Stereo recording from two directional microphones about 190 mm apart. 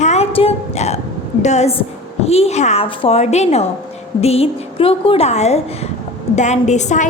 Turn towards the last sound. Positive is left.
turn(degrees=40)  # may be behind; listen again after turning